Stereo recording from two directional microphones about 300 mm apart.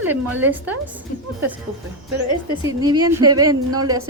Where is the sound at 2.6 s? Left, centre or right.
Centre.